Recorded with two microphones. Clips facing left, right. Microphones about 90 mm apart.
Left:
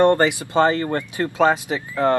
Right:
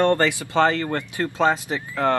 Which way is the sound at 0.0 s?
20° left (ahead or behind).